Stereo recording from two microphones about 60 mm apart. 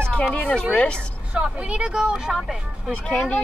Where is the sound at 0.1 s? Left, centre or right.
Centre.